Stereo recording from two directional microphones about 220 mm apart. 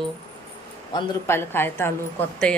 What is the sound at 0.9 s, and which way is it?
Speech, 10° left (ahead or behind).